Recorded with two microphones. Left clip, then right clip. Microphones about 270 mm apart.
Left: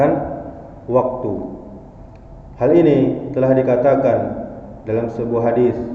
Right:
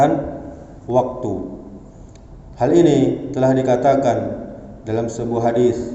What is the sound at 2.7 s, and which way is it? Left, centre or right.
A man's voice, right.